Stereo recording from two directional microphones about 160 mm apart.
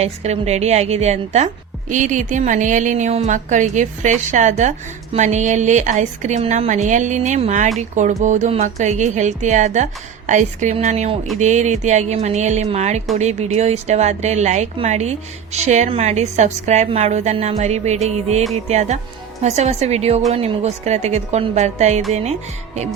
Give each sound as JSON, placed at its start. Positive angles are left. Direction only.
{"t": 0.0, "sound": "speech", "side_deg": -45}